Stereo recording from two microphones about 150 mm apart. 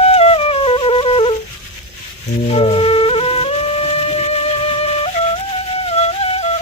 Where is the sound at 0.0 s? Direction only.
40° left (ahead or behind).